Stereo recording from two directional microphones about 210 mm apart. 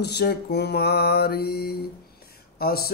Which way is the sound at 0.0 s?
50° left (ahead or behind).